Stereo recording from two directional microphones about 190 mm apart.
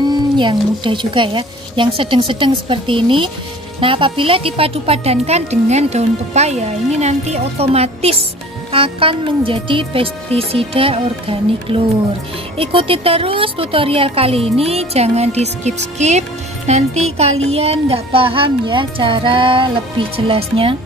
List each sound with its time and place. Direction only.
0.1 s a woman's voice: 25° right (ahead or behind)